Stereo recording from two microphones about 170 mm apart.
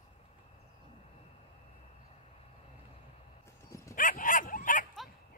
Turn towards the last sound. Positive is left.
turn(degrees=50)  # may be behind; listen again after turning